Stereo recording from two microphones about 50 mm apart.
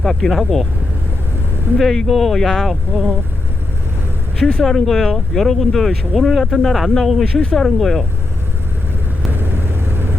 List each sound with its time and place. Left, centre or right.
0.3 s speech: centre
1.8 s speech: centre
2.9 s speech: right
4.4 s speech: centre
9.3 s vehicle: right